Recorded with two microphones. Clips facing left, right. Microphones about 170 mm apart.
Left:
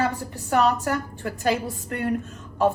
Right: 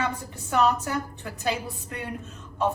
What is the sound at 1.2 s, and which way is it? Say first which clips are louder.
Speech: left 5 dB; 50° left (ahead or behind).